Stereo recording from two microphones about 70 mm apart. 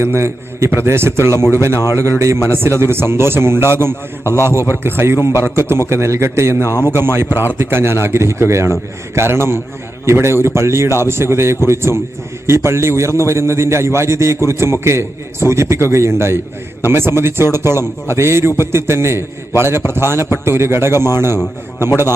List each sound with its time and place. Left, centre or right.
0.0 s a man's voice: right
4.2 s a man's voice: left
4.7 s a man's voice: right